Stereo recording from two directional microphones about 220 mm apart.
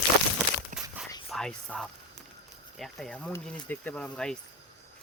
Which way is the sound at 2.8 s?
Centre (ahead or behind).